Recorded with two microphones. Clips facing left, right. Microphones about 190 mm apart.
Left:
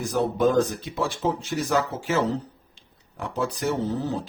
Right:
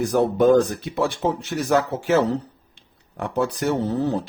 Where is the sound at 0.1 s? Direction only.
60° right (ahead or behind).